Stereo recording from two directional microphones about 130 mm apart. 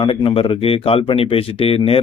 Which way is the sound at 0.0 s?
40° left (ahead or behind).